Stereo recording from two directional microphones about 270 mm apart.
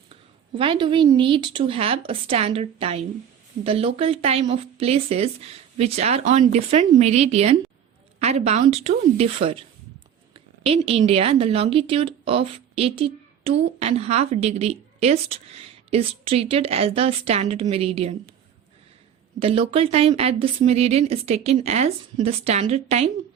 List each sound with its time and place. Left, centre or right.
0.1 s a woman's voice: centre
19.4 s a woman's voice: right